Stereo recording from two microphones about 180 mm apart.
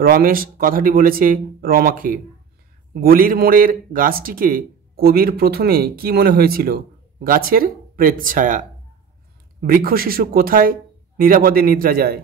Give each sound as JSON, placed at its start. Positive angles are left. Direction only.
{"t": 0.0, "sound": "a man's voice", "side_deg": -55}